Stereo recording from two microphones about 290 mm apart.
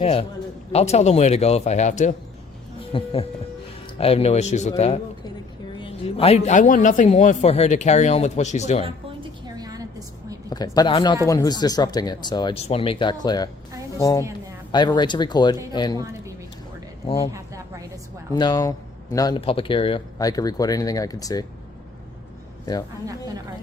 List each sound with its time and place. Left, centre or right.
0.0 s a man's voice: centre
5.8 s a man's voice: centre
9.6 s a sound: centre
10.5 s speech: centre
17.3 s a sound: centre
18.3 s speech: centre